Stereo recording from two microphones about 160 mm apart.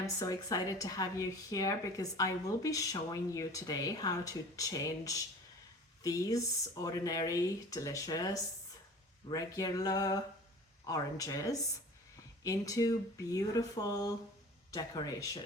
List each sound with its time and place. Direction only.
0.0 s speech: 20° left (ahead or behind)